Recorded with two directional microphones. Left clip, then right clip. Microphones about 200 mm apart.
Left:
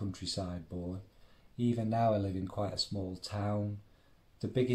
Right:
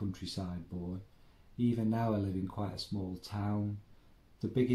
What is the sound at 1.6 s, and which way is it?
Speech, 30° left (ahead or behind).